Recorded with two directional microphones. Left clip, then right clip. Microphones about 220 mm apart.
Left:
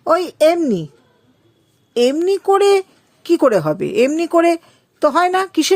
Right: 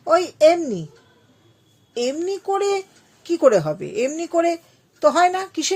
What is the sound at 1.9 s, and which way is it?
Speech, 50° left (ahead or behind).